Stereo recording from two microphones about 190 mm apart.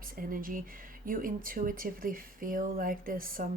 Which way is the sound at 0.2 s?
45° right (ahead or behind).